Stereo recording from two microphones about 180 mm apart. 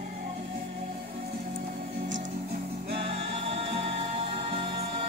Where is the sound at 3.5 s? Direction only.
35° right (ahead or behind).